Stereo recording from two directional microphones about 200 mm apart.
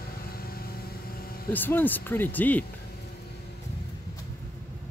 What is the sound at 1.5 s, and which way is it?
Speech, 10° left (ahead or behind).